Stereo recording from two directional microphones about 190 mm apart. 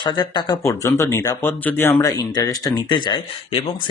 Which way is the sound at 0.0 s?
20° left (ahead or behind).